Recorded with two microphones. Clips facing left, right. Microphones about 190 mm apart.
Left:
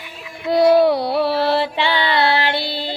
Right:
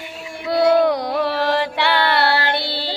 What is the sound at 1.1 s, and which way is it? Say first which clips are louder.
Music: left 2 dB; 10° left (ahead or behind).